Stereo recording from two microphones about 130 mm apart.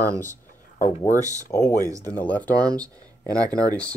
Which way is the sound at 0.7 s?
85° left.